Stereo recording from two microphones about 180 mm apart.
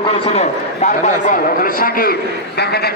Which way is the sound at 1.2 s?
50° left (ahead or behind).